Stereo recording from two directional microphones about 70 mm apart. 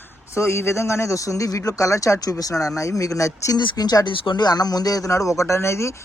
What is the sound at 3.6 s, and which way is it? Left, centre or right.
Speech, left.